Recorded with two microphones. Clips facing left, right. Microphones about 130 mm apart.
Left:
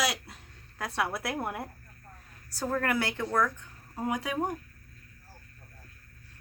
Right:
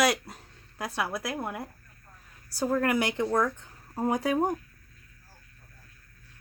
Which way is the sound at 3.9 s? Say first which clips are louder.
Right 5 dB; 40° right (ahead or behind).